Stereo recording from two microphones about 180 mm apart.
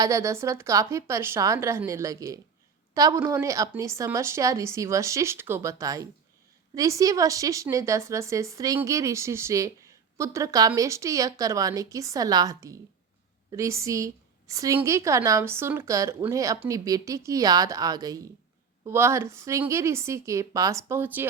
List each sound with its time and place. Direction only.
0.0 s a woman's voice: 15° right (ahead or behind)